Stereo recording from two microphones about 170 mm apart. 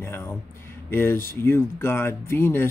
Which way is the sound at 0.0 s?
15° left (ahead or behind).